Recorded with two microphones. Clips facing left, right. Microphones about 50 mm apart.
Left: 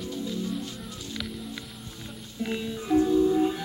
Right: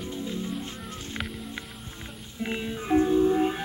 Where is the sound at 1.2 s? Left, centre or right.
Centre.